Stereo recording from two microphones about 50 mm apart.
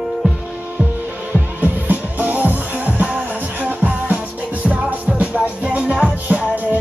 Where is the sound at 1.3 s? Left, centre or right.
Right.